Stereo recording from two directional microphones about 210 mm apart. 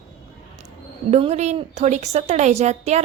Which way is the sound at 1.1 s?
30° right (ahead or behind).